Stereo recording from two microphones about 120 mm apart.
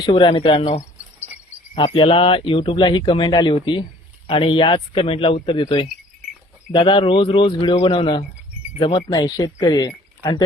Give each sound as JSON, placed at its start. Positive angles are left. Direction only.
{"t": 0.0, "sound": "speech", "side_deg": 40}
{"t": 1.7, "sound": "speech", "side_deg": 50}